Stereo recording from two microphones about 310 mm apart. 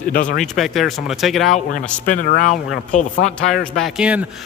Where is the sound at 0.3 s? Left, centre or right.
Centre.